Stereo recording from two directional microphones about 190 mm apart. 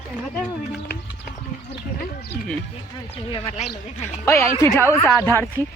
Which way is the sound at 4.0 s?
15° left (ahead or behind).